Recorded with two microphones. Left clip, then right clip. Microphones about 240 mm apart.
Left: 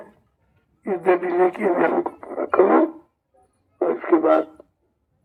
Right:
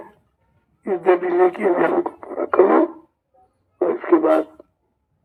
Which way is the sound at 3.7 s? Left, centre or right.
Right.